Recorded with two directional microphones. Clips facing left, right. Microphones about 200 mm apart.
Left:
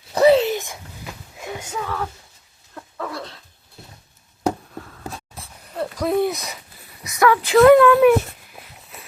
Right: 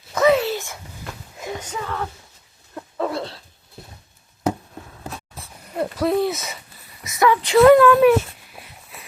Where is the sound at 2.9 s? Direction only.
25° right (ahead or behind).